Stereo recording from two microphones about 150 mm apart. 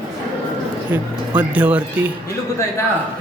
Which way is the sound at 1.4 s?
10° right (ahead or behind).